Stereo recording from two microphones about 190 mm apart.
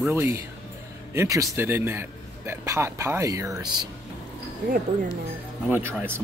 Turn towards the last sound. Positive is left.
turn(degrees=-10)  # may be behind; listen again after turning